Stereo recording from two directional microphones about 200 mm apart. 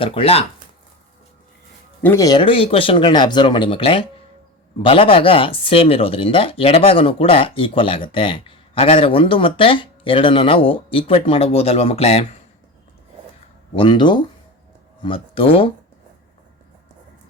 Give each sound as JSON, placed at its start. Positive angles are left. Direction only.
{"t": 0.0, "sound": "speech", "side_deg": 30}
{"t": 2.0, "sound": "speech", "side_deg": 10}
{"t": 13.7, "sound": "speech", "side_deg": 25}